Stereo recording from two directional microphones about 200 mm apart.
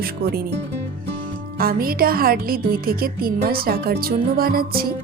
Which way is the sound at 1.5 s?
50° right (ahead or behind).